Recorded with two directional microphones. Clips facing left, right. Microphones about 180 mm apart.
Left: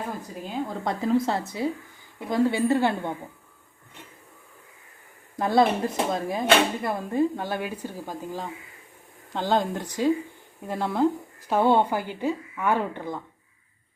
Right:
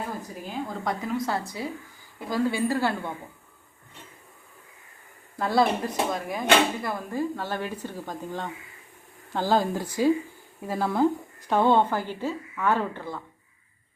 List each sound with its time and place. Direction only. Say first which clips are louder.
0.9 s speech: left 5 dB; 25° left (ahead or behind)
5.4 s speech: left 2 dB; 20° left (ahead or behind)